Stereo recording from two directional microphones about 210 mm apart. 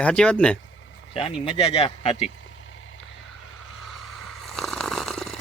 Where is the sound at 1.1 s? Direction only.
25° left (ahead or behind).